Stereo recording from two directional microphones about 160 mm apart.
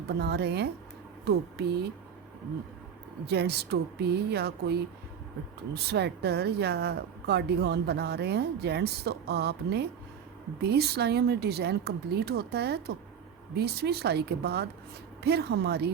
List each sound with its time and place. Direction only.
0.1 s a woman's voice: 90° right
3.2 s a woman's voice: 90° right